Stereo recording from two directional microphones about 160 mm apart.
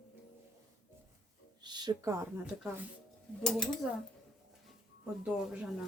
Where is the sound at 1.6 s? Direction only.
25° right (ahead or behind).